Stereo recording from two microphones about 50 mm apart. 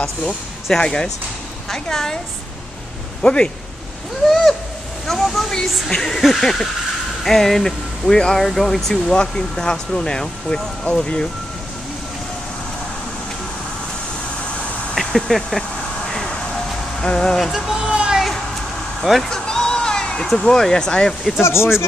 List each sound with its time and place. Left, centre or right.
0.0 s speech: centre
3.2 s speech: centre
5.0 s speech: centre
9.1 s speech: centre
15.0 s speech: centre
16.1 s vehicle: centre
17.0 s speech: centre
17.5 s a sound: centre
19.0 s speech: centre
19.3 s music: centre
20.3 s speech: centre
21.4 s speech: left